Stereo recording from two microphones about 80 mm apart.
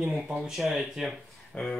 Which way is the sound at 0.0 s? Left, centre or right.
Centre.